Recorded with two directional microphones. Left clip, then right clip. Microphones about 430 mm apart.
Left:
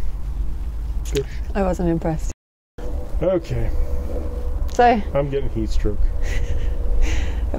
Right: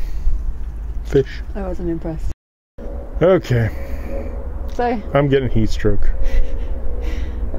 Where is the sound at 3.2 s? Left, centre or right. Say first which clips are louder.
Right 7 dB; right.